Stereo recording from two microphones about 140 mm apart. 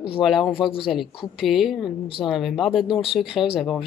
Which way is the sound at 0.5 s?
40° left (ahead or behind).